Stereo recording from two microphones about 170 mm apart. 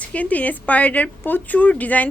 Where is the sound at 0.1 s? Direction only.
10° left (ahead or behind).